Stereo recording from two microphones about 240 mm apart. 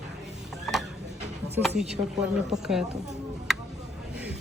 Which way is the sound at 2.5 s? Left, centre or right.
Centre.